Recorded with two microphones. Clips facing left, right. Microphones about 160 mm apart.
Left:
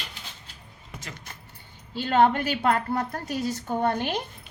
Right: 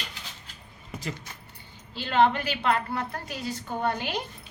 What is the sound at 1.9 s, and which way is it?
A woman's voice, 45° left (ahead or behind).